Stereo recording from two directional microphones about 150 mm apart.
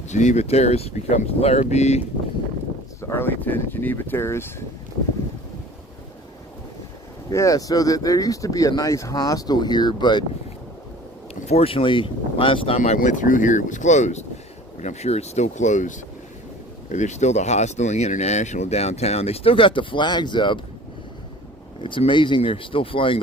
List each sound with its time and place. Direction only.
0.1 s speech: 50° left (ahead or behind)
3.0 s speech: 15° left (ahead or behind)
7.3 s speech: 25° left (ahead or behind)
11.4 s speech: 40° left (ahead or behind)
21.8 s speech: 35° left (ahead or behind)